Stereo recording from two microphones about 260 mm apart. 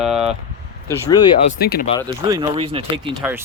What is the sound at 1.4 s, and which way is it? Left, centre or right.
Speech, left.